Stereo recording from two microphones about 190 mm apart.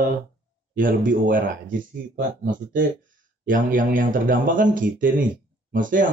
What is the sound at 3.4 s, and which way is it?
Speech, 45° right (ahead or behind).